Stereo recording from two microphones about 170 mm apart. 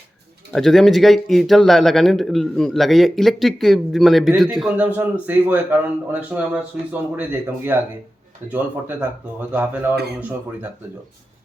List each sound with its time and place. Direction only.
0.5 s speech: centre (ahead or behind)
9.9 s speech: 70° right (ahead or behind)